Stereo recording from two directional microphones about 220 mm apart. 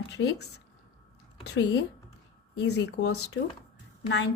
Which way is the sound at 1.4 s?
55° left (ahead or behind).